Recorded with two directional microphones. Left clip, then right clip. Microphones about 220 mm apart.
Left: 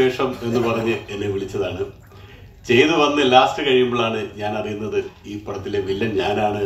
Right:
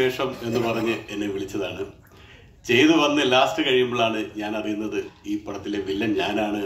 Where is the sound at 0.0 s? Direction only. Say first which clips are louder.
Left 4 dB; 50° right (ahead or behind).